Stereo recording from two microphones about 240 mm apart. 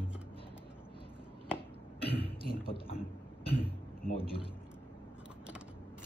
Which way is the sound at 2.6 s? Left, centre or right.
Left.